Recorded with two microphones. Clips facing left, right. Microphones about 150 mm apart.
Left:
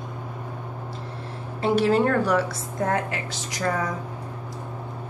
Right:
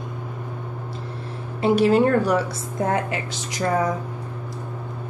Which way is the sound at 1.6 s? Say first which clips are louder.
Right 3 dB; 10° right (ahead or behind).